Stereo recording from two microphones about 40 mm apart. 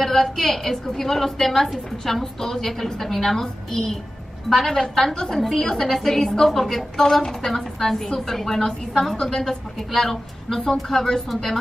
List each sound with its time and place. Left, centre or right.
0.0 s a woman's voice: centre
9.4 s a woman's voice: centre